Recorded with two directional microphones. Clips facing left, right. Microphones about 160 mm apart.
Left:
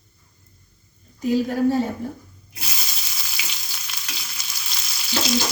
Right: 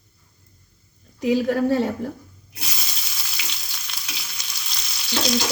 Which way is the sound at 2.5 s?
Centre (ahead or behind).